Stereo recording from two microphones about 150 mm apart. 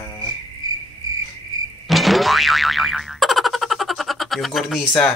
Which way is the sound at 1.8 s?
Centre (ahead or behind).